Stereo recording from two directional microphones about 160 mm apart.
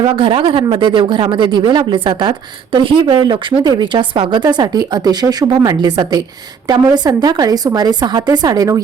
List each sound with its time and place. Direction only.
0.0 s speech: 35° right (ahead or behind)